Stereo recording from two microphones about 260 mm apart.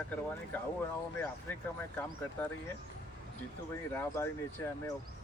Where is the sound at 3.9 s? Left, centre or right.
Centre.